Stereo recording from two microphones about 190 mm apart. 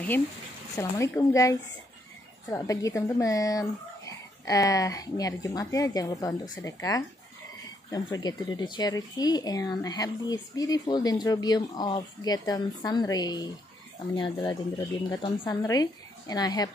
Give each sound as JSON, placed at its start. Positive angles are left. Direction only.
{"t": 0.7, "sound": "a woman's voice", "side_deg": 15}